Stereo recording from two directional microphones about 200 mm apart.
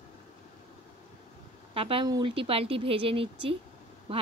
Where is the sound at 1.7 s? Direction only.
30° right (ahead or behind).